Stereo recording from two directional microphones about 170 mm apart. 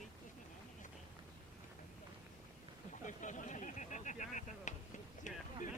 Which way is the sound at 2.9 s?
45° left (ahead or behind).